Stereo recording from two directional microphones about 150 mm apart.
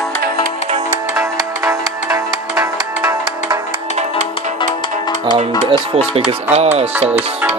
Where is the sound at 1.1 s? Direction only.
20° right (ahead or behind).